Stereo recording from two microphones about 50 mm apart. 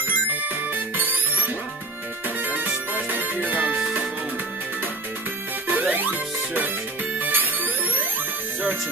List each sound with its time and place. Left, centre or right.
2.2 s music: right
5.7 s music: right